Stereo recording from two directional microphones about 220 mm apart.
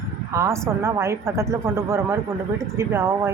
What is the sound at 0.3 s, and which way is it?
Speech, 10° right (ahead or behind).